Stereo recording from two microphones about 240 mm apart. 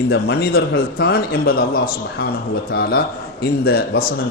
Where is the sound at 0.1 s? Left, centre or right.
Left.